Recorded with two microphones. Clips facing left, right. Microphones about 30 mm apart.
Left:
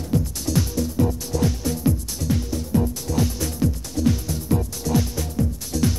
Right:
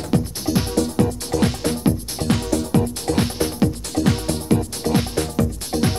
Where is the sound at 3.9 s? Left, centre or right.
Right.